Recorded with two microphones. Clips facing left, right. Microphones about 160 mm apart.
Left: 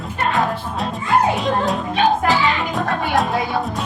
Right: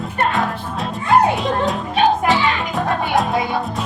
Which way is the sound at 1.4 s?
Centre (ahead or behind).